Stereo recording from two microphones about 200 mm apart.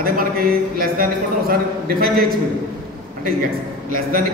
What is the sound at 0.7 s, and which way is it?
A man's voice, 45° right (ahead or behind).